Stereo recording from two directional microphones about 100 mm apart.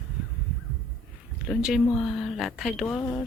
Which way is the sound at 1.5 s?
5° right (ahead or behind).